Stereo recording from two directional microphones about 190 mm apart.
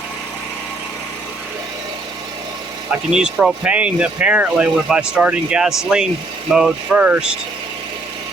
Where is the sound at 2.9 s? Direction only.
5° right (ahead or behind).